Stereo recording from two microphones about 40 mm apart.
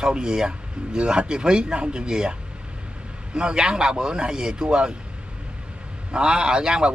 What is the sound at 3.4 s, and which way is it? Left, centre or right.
A man's voice, right.